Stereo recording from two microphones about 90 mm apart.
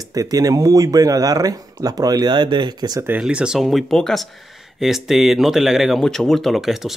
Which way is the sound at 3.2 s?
10° right (ahead or behind).